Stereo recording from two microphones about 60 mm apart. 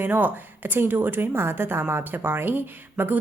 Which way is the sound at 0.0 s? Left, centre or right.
Right.